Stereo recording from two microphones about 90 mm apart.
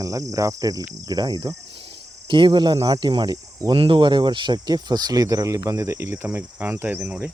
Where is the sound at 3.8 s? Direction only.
60° right (ahead or behind); by 6.3 s 30° right (ahead or behind).